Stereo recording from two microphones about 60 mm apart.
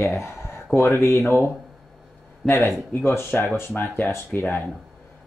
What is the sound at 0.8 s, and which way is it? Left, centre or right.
Speech, left.